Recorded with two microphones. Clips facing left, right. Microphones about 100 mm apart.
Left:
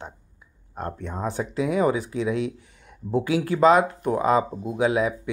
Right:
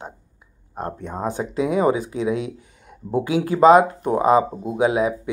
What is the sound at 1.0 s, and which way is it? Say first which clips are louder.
Speech: right 2 dB; 20° right (ahead or behind).